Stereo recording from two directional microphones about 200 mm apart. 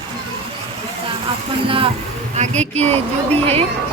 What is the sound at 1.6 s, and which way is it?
Speech, 25° right (ahead or behind).